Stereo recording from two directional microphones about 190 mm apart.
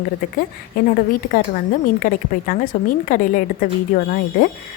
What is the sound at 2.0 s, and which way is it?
A woman's voice, 45° left (ahead or behind).